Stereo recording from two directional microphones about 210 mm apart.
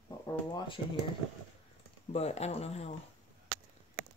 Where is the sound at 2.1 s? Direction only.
30° left (ahead or behind).